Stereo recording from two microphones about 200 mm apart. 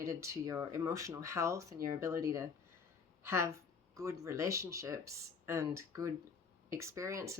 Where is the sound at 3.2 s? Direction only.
15° right (ahead or behind).